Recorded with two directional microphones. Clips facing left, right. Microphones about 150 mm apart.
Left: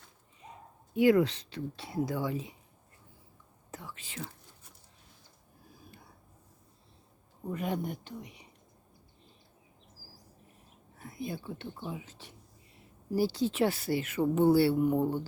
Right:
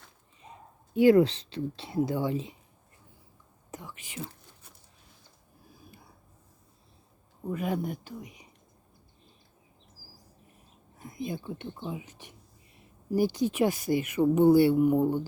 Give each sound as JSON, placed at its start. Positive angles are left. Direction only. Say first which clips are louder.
{"t": 0.9, "sound": "speech", "louder": "right 4 dB", "side_deg": -30}
{"t": 3.7, "sound": "whispering", "louder": "right 2 dB", "side_deg": -15}
{"t": 7.4, "sound": "speech", "louder": "right 3 dB", "side_deg": -10}
{"t": 8.2, "sound": "speech", "louder": "right 2 dB", "side_deg": 30}
{"t": 11.0, "sound": "speech", "louder": "right 3 dB", "side_deg": -15}